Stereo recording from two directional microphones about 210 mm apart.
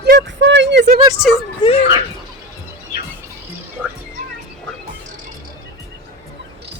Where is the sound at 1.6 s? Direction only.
20° left (ahead or behind).